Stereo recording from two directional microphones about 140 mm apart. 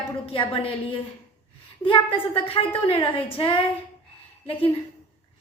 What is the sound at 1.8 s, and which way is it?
A woman's voice, 35° left (ahead or behind).